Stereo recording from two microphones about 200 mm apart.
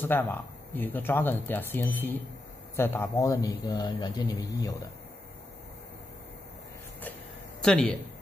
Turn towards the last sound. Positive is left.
turn(degrees=5)  # may be behind; listen again after turning